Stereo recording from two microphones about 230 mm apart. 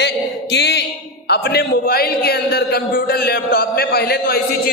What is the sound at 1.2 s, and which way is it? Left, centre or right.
A man's voice, left.